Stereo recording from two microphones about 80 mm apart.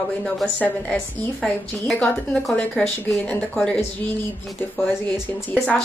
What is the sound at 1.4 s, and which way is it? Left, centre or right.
Speech, centre.